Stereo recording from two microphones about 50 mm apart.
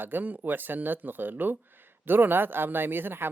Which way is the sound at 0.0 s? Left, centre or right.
Right.